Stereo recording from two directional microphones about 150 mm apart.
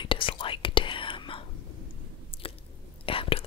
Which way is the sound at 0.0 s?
35° left (ahead or behind).